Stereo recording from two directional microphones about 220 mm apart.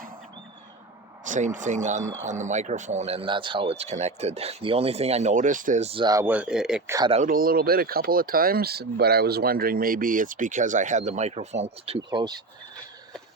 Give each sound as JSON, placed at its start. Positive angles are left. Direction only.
{"t": 1.2, "sound": "speech", "side_deg": -35}
{"t": 6.9, "sound": "speech", "side_deg": -20}
{"t": 7.2, "sound": "speech", "side_deg": -40}